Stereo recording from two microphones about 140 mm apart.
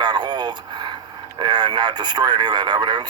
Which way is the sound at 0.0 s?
30° right (ahead or behind).